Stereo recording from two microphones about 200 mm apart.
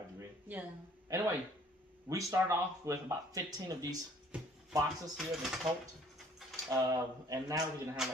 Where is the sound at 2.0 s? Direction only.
15° right (ahead or behind).